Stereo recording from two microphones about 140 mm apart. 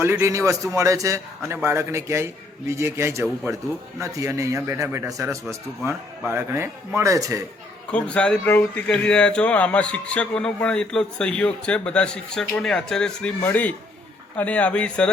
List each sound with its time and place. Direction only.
0.0 s a man's voice: 20° right (ahead or behind)
7.9 s speech: 10° left (ahead or behind)